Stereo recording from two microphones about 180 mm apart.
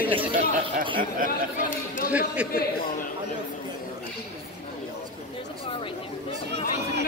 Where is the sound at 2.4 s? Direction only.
5° right (ahead or behind).